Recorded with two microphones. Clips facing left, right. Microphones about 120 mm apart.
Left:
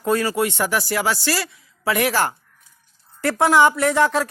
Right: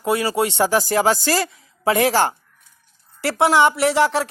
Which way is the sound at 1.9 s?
30° right (ahead or behind).